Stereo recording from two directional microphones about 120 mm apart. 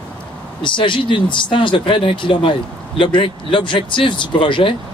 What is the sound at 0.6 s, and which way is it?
Speech, 45° left (ahead or behind).